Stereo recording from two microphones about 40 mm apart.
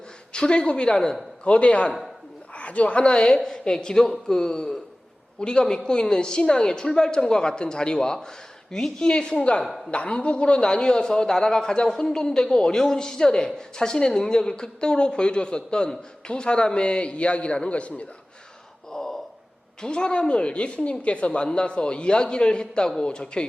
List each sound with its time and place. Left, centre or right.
0.3 s a man's voice: left
1.5 s a man's voice: left
18.9 s gasp: centre
19.8 s a man's voice: left